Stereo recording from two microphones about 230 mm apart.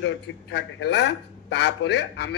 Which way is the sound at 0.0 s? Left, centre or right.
Left.